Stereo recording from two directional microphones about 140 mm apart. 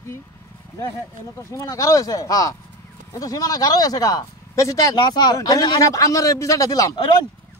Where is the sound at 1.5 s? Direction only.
20° left (ahead or behind).